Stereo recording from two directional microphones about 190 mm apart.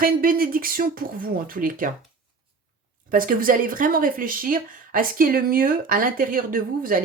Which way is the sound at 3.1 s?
45° right (ahead or behind).